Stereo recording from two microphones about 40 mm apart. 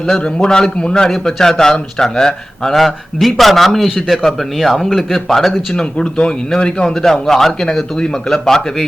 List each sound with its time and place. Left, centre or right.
0.3 s speech: centre
5.7 s speech: left
6.9 s speech: centre